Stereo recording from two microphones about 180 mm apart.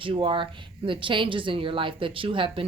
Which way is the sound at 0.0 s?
30° right (ahead or behind).